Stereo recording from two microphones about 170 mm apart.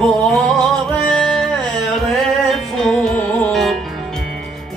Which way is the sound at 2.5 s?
5° left (ahead or behind).